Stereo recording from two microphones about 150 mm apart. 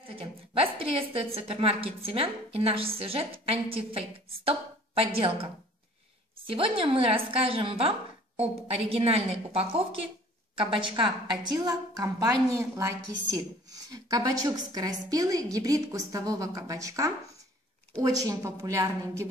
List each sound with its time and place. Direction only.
0.0 s a woman's voice: 35° right (ahead or behind)
6.5 s a woman's voice: 35° right (ahead or behind); by 19.2 s 20° right (ahead or behind)